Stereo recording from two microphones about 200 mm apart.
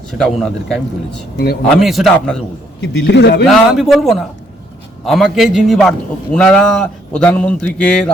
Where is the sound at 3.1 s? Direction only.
60° left (ahead or behind).